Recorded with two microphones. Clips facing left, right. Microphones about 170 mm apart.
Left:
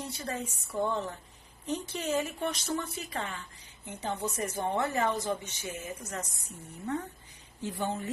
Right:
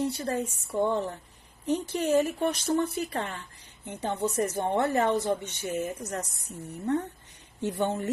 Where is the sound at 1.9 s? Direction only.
60° right (ahead or behind).